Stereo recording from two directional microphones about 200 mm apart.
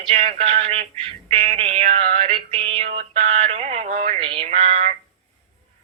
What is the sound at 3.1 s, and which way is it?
Mantra, 30° right (ahead or behind).